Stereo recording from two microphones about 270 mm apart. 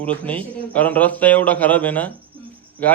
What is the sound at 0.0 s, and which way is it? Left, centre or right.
A man's voice, centre.